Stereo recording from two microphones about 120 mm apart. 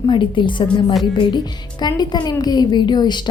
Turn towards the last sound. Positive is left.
turn(degrees=35)  # may be behind; listen again after turning